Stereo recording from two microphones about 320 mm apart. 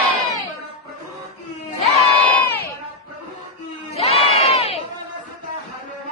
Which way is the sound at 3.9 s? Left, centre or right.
Centre.